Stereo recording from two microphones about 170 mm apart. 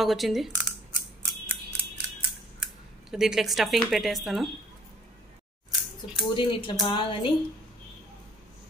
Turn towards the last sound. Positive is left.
turn(degrees=30)  # may be behind; listen again after turning